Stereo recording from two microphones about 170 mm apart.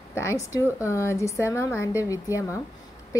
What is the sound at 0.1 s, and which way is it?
A woman's voice, 15° left (ahead or behind).